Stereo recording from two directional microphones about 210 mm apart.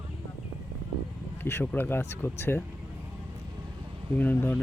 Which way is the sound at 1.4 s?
10° left (ahead or behind).